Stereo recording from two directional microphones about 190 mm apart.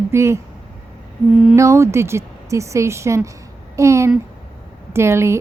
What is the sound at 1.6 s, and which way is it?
A woman's voice, 15° right (ahead or behind).